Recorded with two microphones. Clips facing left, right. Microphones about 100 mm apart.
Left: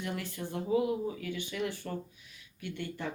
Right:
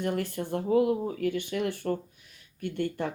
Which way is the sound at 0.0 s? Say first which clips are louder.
Right 7 dB; 50° right (ahead or behind).